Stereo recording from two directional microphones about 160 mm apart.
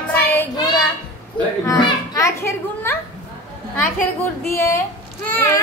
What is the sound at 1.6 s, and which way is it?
A child's voice, 25° left (ahead or behind).